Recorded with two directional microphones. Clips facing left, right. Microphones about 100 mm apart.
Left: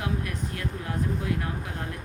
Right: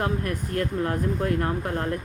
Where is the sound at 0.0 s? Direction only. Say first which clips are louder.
Right 4 dB; 50° right (ahead or behind).